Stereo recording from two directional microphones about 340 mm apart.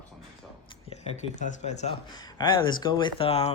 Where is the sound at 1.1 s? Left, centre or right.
Left.